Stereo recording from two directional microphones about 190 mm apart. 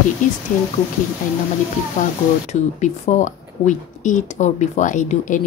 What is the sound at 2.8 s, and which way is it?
A woman's voice, 40° left (ahead or behind).